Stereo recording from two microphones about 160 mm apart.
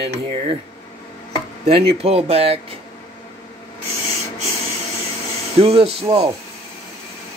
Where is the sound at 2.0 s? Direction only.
40° right (ahead or behind).